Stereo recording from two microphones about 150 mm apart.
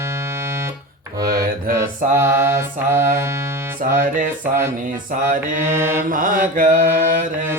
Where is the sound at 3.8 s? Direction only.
65° right (ahead or behind).